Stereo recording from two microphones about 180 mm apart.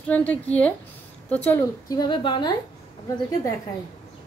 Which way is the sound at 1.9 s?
25° left (ahead or behind).